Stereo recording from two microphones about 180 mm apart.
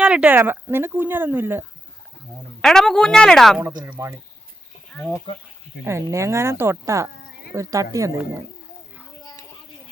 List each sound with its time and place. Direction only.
0.0 s speech: 5° right (ahead or behind)
2.6 s a woman's voice: 5° left (ahead or behind)
3.8 s speech: 10° right (ahead or behind)
4.9 s speech: 5° left (ahead or behind)
5.8 s speech: 15° right (ahead or behind)